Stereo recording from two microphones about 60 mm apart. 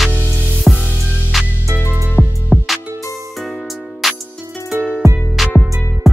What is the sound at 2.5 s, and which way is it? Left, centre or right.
Music, centre.